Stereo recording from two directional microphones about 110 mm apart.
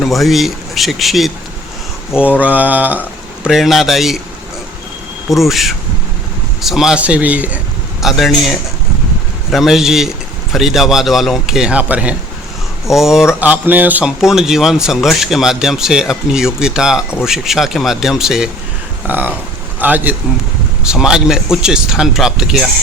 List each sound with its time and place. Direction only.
0.0 s speech: centre (ahead or behind)
2.4 s speech: 15° right (ahead or behind)
3.4 s speech: centre (ahead or behind)
5.3 s speech: centre (ahead or behind)
8.0 s speech: centre (ahead or behind)
13.4 s speech: 15° right (ahead or behind)
14.2 s speech: 5° right (ahead or behind)
19.0 s speech: 15° right (ahead or behind)